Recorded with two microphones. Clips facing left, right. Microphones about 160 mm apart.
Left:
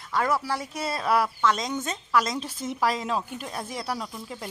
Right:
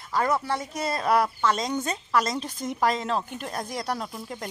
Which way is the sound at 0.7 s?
5° left (ahead or behind).